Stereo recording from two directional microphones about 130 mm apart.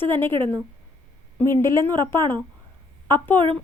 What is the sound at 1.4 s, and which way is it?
Speech, 20° left (ahead or behind).